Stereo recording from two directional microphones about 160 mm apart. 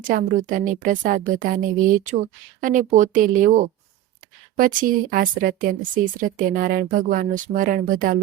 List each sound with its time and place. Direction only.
0.0 s a woman's voice: 60° right (ahead or behind)
2.6 s a woman's voice: 55° right (ahead or behind)